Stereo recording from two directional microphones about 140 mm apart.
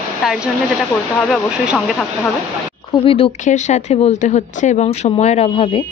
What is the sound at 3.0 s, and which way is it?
Speech, 40° left (ahead or behind).